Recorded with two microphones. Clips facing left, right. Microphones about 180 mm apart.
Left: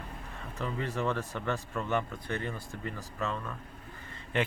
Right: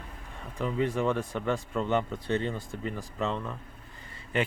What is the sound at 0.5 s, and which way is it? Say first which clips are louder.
Speech: right 6 dB; 15° right (ahead or behind).